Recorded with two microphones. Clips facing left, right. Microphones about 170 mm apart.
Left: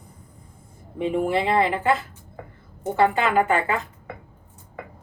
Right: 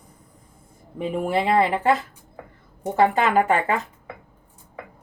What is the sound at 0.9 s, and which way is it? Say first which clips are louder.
Speech: left 1 dB; 35° right (ahead or behind).